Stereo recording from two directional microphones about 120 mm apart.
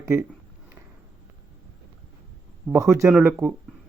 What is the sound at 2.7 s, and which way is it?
Speech, 10° right (ahead or behind).